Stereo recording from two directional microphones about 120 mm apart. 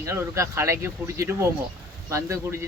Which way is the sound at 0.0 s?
25° right (ahead or behind).